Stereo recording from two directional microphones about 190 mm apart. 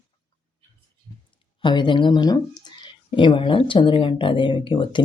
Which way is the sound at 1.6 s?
25° left (ahead or behind).